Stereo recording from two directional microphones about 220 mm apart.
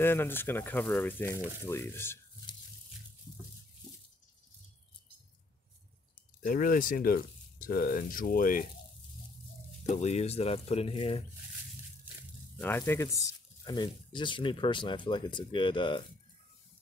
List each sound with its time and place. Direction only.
0.0 s speech: 10° left (ahead or behind)
6.4 s speech: 40° left (ahead or behind)
9.8 s speech: 30° left (ahead or behind)
12.5 s speech: 10° left (ahead or behind)